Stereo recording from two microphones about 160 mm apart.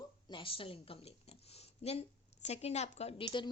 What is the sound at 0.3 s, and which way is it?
A woman's voice, 35° left (ahead or behind).